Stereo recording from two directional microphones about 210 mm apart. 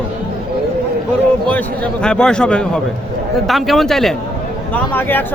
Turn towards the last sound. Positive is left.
turn(degrees=10)  # may be behind; listen again after turning